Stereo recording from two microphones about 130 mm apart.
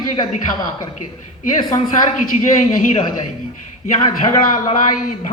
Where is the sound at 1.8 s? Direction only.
90° left.